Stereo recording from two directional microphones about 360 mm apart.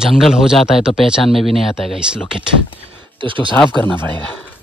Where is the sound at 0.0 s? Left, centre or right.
Centre.